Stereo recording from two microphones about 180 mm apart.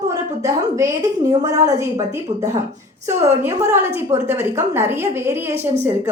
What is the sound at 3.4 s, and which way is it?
A woman's voice, 15° right (ahead or behind).